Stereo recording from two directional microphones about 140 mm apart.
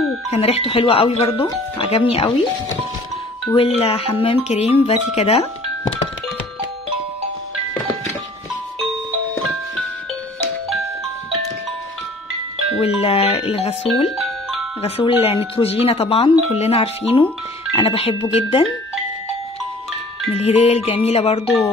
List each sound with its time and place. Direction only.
0.3 s speech: 45° left (ahead or behind)
3.5 s speech: 45° left (ahead or behind)
12.8 s speech: 45° left (ahead or behind)
14.1 s music: 5° right (ahead or behind)
14.8 s speech: 45° left (ahead or behind)
20.3 s speech: 50° left (ahead or behind)